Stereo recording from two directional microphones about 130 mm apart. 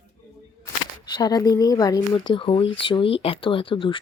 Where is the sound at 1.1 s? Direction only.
30° left (ahead or behind).